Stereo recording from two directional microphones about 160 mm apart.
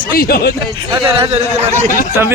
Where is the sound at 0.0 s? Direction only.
65° left (ahead or behind).